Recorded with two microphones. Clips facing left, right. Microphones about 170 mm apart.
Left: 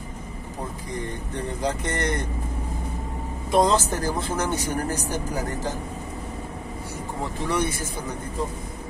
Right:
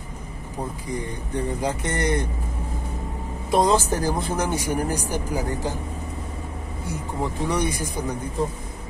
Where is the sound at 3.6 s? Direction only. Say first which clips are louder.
Right 2 dB; 10° right (ahead or behind).